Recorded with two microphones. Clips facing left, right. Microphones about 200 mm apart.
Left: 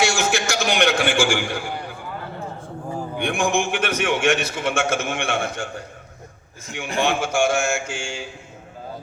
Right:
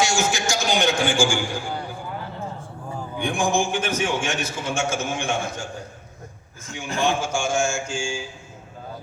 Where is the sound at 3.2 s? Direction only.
65° left (ahead or behind).